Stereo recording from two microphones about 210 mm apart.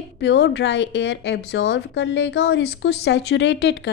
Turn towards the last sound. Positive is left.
turn(degrees=55)  # may be behind; listen again after turning